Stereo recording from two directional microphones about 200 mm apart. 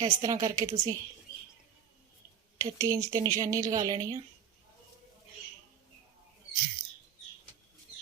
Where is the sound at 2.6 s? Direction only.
15° right (ahead or behind).